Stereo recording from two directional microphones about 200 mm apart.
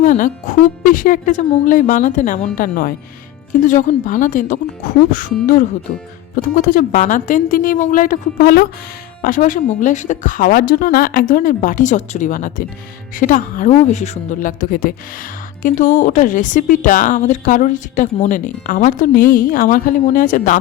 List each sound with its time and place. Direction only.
0.0 s speech: 40° left (ahead or behind)